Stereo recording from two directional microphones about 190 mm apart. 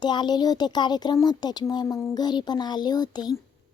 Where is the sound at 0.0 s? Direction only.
25° left (ahead or behind).